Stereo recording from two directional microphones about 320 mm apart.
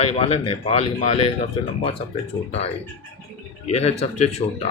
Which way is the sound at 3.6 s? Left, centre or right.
Centre.